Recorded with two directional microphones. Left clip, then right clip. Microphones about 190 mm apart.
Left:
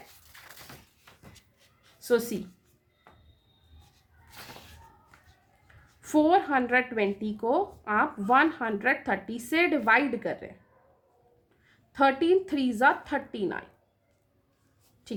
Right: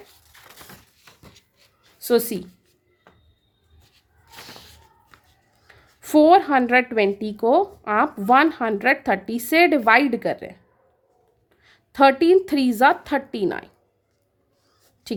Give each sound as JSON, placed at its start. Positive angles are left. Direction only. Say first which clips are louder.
{"t": 2.0, "sound": "a woman's voice", "louder": "right 6 dB", "side_deg": -45}
{"t": 5.6, "sound": "a woman's voice", "louder": "right 7 dB", "side_deg": -45}
{"t": 11.6, "sound": "a woman's voice", "louder": "right 8 dB", "side_deg": -50}